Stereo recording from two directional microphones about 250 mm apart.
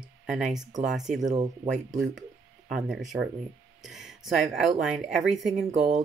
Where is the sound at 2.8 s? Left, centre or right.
Centre.